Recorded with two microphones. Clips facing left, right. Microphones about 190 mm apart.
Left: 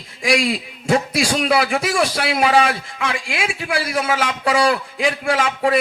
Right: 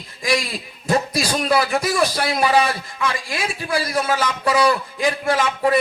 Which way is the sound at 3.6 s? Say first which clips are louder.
Right 1 dB; 85° left.